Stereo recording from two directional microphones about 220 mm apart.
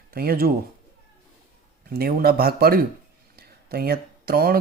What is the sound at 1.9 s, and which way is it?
Speech, 45° right (ahead or behind).